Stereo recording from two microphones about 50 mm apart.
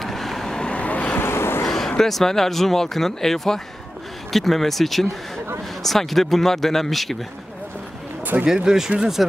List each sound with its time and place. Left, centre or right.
0.0 s vehicle: centre
0.7 s vehicle: left
1.1 s vehicle: left
1.7 s speech: centre
8.5 s speech: centre